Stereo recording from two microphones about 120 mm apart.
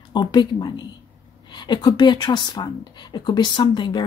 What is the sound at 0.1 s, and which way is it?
Speech, 40° left (ahead or behind).